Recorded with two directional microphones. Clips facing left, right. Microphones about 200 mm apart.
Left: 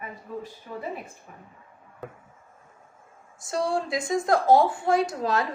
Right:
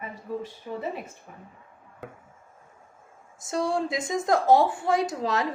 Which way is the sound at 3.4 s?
20° right (ahead or behind).